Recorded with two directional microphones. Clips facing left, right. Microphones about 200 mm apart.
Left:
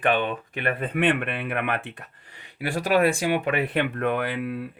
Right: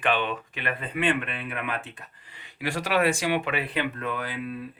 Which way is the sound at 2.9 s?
45° left (ahead or behind).